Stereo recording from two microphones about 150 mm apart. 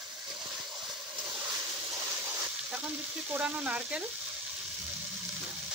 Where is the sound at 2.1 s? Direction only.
5° right (ahead or behind).